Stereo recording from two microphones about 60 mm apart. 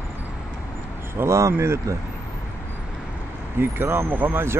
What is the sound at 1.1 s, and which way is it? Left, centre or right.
Vehicle, right.